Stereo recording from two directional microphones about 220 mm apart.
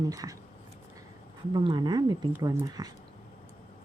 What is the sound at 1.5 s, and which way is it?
Speech, 20° right (ahead or behind).